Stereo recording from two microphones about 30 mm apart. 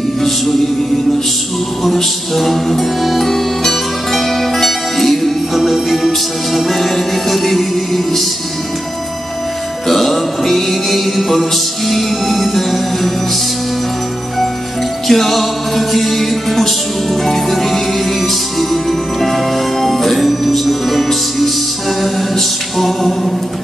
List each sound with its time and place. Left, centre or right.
2.3 s music: centre
9.8 s music: centre
15.0 s music: centre
22.8 s music: centre